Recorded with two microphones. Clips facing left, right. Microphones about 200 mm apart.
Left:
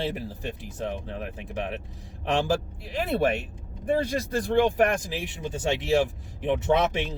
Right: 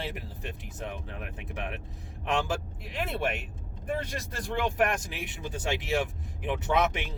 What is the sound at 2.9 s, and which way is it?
Speech, 35° left (ahead or behind).